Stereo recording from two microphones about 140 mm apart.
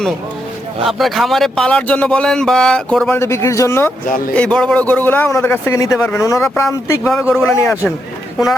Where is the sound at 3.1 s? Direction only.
20° left (ahead or behind).